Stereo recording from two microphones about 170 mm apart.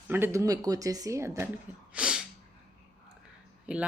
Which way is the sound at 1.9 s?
5° right (ahead or behind).